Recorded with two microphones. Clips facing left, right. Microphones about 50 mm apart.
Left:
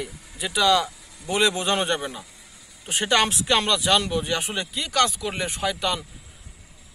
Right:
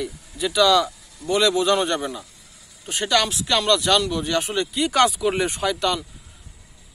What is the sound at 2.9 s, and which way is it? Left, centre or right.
Speech, left.